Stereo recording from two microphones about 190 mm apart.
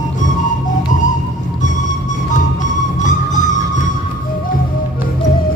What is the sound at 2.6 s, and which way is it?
Music, 40° left (ahead or behind).